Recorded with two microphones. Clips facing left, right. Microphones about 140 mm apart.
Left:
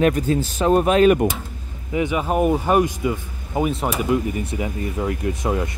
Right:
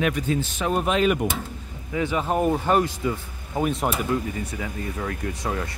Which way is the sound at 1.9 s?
15° left (ahead or behind).